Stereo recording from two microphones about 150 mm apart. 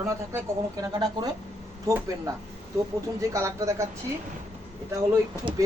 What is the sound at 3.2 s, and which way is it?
Speech, 20° right (ahead or behind).